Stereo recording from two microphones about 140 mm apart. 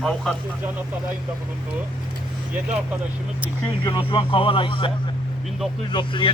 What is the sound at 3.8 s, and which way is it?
Speech, 35° left (ahead or behind).